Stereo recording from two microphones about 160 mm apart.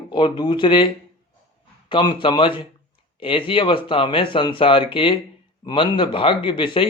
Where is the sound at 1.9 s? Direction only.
30° left (ahead or behind).